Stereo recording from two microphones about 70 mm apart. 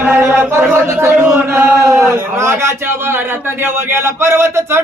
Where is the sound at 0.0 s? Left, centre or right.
Right.